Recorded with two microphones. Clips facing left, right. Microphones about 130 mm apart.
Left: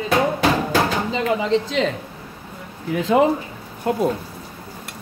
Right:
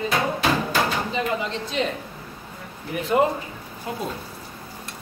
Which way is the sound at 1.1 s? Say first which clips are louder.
Left 6 dB; 90° left.